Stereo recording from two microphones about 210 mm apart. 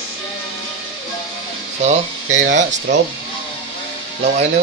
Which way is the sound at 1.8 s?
35° right (ahead or behind).